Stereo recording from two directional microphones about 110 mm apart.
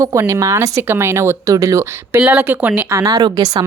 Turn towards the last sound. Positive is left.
turn(degrees=-40)  # may be behind; listen again after turning